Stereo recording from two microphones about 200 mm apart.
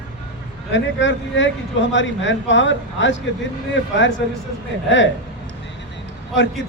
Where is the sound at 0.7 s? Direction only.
65° left (ahead or behind).